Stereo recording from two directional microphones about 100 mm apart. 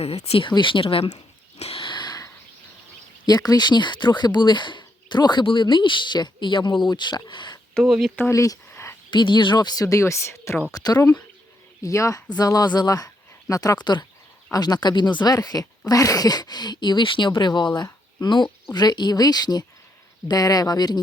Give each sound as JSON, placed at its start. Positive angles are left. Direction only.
{"t": 0.0, "sound": "speech", "side_deg": 85}
{"t": 0.4, "sound": "speech", "side_deg": 55}
{"t": 1.5, "sound": "dog", "side_deg": 90}
{"t": 1.8, "sound": "a sound", "side_deg": 50}
{"t": 3.2, "sound": "speech", "side_deg": 40}
{"t": 7.7, "sound": "speech", "side_deg": 0}
{"t": 8.3, "sound": "speech", "side_deg": 35}
{"t": 8.7, "sound": "a sound", "side_deg": 25}
{"t": 9.0, "sound": "speech", "side_deg": 50}
{"t": 10.7, "sound": "speech", "side_deg": 40}